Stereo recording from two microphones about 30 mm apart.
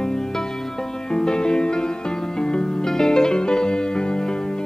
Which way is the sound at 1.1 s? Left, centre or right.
Left.